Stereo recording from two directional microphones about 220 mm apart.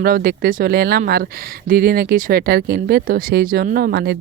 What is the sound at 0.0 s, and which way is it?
Speech, 45° right (ahead or behind).